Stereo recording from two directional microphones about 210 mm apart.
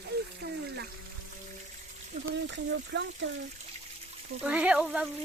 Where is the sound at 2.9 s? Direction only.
60° right (ahead or behind).